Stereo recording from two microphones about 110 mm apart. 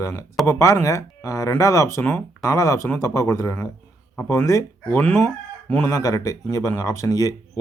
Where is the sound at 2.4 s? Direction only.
30° left (ahead or behind).